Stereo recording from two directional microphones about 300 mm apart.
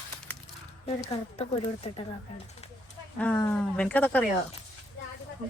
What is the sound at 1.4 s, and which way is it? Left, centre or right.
Speech, centre.